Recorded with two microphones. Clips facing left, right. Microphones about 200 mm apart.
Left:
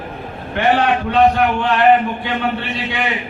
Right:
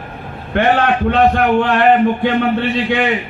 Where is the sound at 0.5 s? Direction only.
55° right (ahead or behind).